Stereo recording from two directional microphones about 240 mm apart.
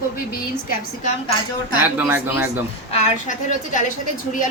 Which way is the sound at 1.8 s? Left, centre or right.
Centre.